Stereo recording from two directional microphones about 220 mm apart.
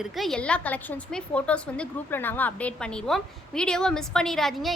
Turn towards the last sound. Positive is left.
turn(degrees=0)  # may be behind; listen again after turning